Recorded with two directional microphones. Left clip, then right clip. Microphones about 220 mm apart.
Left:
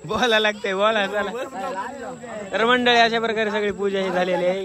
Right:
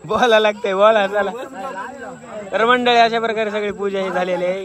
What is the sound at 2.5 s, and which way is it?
A man's voice, 10° left (ahead or behind).